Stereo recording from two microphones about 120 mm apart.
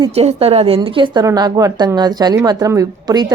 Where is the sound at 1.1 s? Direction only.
35° right (ahead or behind).